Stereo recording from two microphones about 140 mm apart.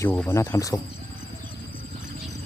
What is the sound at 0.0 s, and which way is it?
Speech, 15° left (ahead or behind).